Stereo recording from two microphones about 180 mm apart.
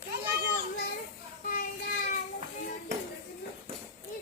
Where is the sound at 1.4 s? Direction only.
50° left (ahead or behind).